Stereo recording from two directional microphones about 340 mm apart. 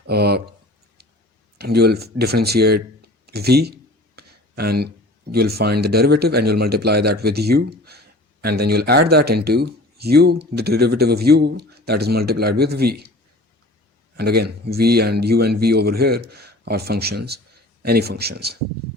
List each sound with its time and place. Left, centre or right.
0.0 s speech: right
1.5 s speech: right
3.2 s a sound: right
5.3 s speech: right
14.2 s speech: right